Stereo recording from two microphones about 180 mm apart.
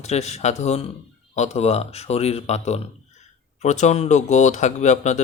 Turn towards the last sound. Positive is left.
turn(degrees=40)  # may be behind; listen again after turning